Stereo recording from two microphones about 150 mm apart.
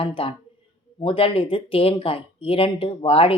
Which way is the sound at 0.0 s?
35° left (ahead or behind).